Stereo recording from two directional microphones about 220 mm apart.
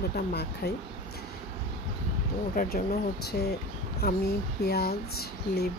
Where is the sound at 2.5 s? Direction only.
40° left (ahead or behind).